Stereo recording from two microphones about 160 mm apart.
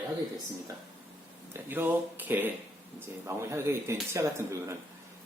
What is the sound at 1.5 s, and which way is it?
A man's voice, 10° right (ahead or behind).